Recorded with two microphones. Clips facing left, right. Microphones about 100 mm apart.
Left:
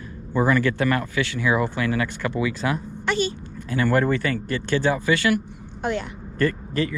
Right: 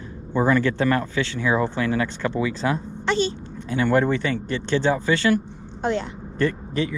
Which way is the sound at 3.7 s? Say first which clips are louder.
Right 1 dB; centre (ahead or behind).